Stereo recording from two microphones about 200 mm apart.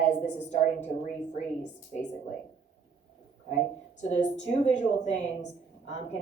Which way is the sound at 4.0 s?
35° left (ahead or behind).